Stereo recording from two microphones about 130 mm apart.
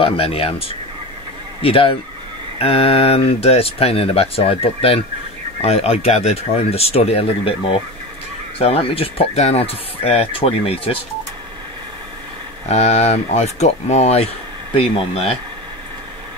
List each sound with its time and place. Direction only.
0.0 s speech: 45° left (ahead or behind)
12.6 s speech: 60° left (ahead or behind)